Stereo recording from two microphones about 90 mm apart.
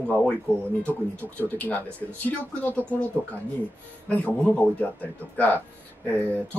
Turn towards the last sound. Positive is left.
turn(degrees=20)  # may be behind; listen again after turning